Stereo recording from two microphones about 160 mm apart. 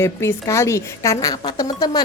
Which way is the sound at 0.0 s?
15° left (ahead or behind).